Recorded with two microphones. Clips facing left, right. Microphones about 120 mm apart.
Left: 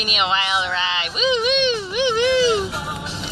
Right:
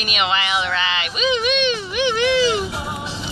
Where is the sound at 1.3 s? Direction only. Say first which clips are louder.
Left 1 dB; 30° left (ahead or behind).